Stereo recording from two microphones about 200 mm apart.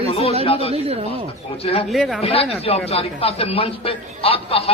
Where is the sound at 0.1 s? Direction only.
30° left (ahead or behind).